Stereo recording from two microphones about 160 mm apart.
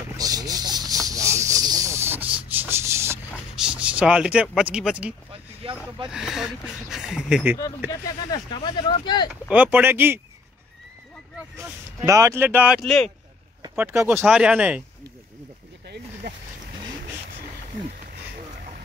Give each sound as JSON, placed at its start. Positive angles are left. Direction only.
{"t": 0.2, "sound": "a sound", "side_deg": -25}
{"t": 1.0, "sound": "snake", "side_deg": -20}
{"t": 2.5, "sound": "rub", "side_deg": -15}
{"t": 3.6, "sound": "speech", "side_deg": -5}
{"t": 5.3, "sound": "a sound", "side_deg": -35}
{"t": 6.0, "sound": "speech", "side_deg": -5}
{"t": 7.9, "sound": "speech", "side_deg": 25}
{"t": 9.5, "sound": "speech", "side_deg": -10}
{"t": 12.1, "sound": "speech", "side_deg": -15}
{"t": 12.8, "sound": "speech", "side_deg": 0}
{"t": 13.7, "sound": "speech", "side_deg": -15}